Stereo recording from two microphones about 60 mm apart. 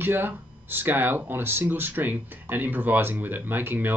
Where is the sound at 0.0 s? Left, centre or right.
Right.